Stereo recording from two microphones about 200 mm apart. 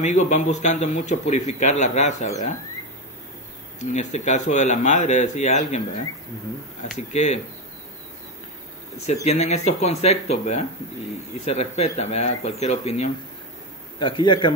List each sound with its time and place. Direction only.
0.0 s a man's voice: 35° left (ahead or behind)
3.9 s a man's voice: 35° left (ahead or behind)
7.0 s a man's voice: 35° left (ahead or behind)
9.0 s a man's voice: 35° left (ahead or behind)